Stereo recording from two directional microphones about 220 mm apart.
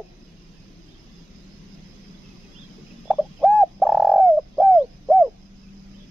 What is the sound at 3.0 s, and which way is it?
Bird, centre (ahead or behind).